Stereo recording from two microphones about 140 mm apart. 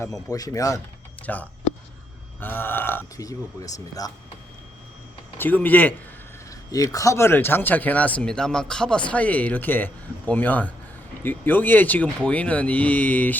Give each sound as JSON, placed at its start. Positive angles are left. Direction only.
{"t": 0.0, "sound": "speech", "side_deg": 25}
{"t": 1.3, "sound": "speech", "side_deg": 10}
{"t": 5.4, "sound": "speech", "side_deg": 10}
{"t": 6.7, "sound": "speech", "side_deg": 25}